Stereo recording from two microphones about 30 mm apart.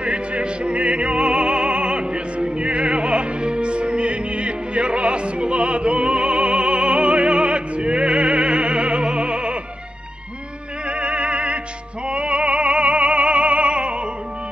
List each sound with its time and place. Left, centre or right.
0.0 s music: right
10.9 s opera: right
12.1 s music: right